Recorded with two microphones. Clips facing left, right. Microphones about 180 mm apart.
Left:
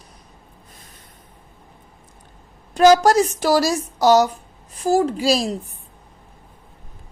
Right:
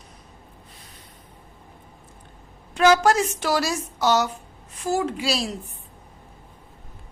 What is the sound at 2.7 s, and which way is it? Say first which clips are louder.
Speech: left 5 dB; 40° left (ahead or behind).